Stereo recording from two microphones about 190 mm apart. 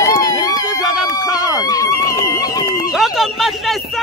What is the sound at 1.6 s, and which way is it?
Speech, 20° left (ahead or behind).